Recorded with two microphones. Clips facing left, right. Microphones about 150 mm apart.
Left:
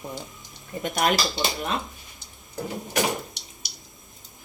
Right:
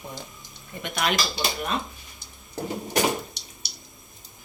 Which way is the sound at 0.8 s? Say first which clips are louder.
Left 3 dB; 40° left (ahead or behind).